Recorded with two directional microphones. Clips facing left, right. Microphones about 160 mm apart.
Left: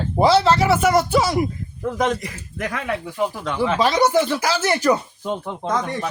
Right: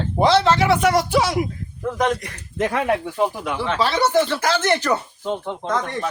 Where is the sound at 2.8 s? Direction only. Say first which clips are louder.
Right 1 dB; 35° right (ahead or behind).